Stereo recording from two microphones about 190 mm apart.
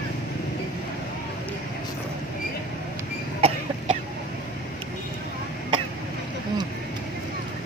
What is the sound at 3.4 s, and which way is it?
Cough, 30° right (ahead or behind).